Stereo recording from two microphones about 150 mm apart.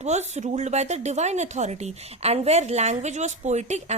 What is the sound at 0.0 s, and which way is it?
A woman's voice, 50° right (ahead or behind).